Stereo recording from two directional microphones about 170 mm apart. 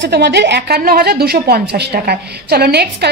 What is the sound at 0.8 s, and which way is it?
A woman's voice, 60° right (ahead or behind).